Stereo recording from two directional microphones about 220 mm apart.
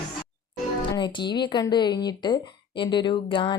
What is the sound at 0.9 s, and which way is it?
Speech, 20° left (ahead or behind).